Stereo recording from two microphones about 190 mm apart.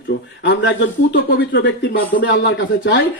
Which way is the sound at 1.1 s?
60° left (ahead or behind).